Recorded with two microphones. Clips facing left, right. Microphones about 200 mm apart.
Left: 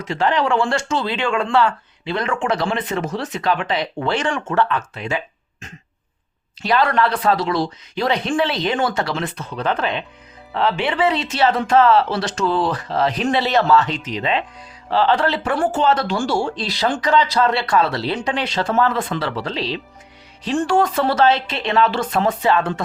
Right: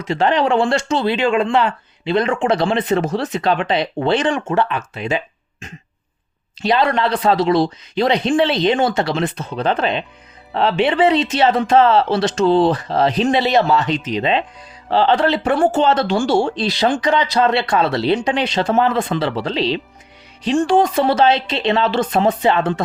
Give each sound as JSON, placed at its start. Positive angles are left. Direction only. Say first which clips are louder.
{"t": 0.0, "sound": "speech", "louder": "right 3 dB", "side_deg": -20}